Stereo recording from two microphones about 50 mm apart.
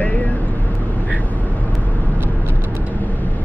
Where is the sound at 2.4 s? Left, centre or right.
Right.